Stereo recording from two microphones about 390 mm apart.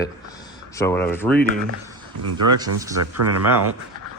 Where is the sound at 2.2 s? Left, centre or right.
Right.